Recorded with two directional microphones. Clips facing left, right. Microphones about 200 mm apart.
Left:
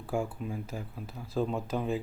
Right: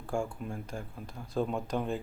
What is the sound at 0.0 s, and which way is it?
Speech, 5° left (ahead or behind).